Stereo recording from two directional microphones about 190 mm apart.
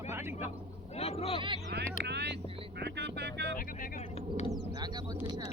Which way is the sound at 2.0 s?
60° right (ahead or behind).